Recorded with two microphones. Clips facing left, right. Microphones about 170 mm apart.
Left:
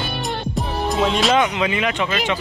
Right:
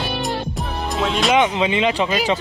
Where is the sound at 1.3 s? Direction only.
25° right (ahead or behind).